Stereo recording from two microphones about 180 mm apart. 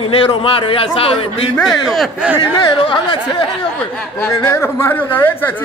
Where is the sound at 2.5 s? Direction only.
30° left (ahead or behind).